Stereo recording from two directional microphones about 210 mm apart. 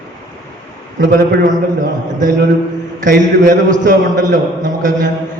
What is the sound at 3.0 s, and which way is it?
A man's voice, 40° right (ahead or behind).